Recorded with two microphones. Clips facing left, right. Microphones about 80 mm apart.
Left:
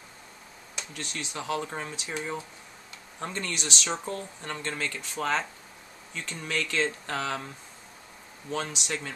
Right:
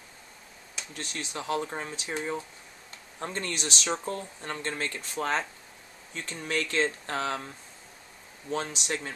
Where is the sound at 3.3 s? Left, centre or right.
Right.